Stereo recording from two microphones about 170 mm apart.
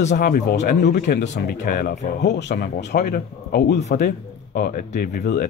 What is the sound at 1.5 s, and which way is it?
Speech, 65° left (ahead or behind).